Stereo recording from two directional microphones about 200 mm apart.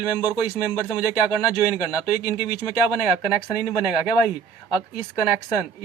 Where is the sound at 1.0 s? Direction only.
5° right (ahead or behind).